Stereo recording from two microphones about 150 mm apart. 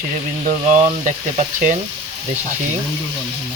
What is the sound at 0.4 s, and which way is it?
Speech, 50° right (ahead or behind).